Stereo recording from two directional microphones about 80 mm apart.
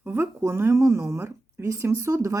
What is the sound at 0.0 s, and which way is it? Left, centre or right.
Speech, right.